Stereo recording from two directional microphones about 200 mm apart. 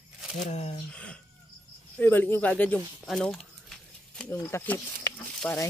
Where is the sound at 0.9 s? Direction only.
5° left (ahead or behind).